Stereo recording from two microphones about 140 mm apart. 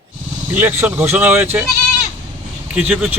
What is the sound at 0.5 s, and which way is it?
Speech, 15° right (ahead or behind).